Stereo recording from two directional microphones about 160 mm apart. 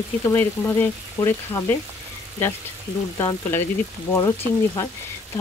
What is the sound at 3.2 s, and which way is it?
Speech, 15° left (ahead or behind).